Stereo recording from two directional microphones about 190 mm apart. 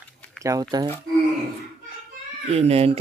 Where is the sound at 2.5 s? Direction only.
35° right (ahead or behind).